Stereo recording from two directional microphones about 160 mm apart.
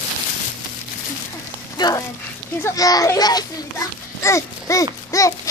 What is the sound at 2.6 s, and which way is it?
Children playing, 20° left (ahead or behind).